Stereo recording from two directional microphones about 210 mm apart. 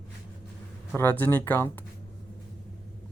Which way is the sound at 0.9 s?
10° left (ahead or behind).